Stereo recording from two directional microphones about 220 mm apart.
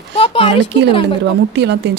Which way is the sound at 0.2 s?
25° left (ahead or behind).